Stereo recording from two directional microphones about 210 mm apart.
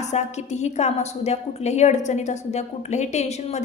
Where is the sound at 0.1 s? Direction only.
35° left (ahead or behind).